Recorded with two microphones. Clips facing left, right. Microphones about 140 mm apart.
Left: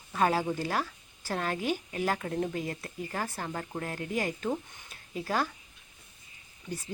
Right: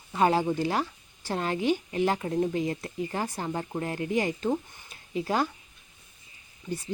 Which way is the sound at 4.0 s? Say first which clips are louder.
Right 5 dB; centre (ahead or behind).